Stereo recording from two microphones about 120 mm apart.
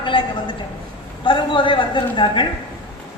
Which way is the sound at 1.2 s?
45° left (ahead or behind).